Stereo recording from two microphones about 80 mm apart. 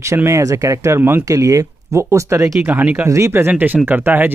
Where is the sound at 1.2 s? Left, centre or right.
Right.